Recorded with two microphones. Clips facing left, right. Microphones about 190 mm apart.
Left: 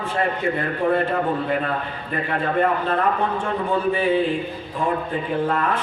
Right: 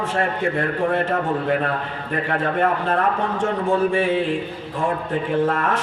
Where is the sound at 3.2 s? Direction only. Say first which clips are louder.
Right 1 dB; 90° right.